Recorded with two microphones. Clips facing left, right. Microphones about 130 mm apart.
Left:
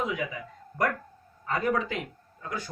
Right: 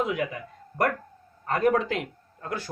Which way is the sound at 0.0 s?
55° right (ahead or behind).